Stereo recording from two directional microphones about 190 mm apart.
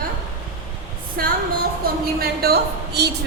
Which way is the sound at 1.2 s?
55° right (ahead or behind).